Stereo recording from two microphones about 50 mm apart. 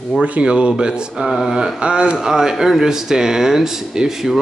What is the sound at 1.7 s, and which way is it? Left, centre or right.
Speech, right.